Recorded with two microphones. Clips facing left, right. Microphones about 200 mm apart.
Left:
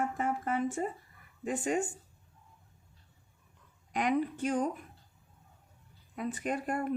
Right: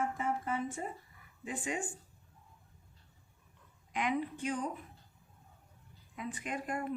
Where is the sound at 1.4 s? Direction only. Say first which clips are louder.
Left 7 dB; 45° left (ahead or behind).